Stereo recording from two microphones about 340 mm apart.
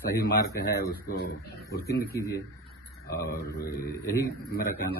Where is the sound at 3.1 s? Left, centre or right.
Left.